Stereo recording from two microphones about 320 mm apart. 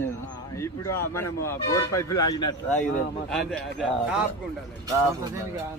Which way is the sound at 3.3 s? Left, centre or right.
Centre.